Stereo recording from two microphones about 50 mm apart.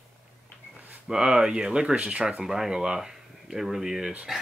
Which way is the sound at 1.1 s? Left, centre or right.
Centre.